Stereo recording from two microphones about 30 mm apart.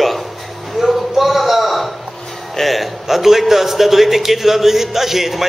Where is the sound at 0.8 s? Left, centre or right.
Centre.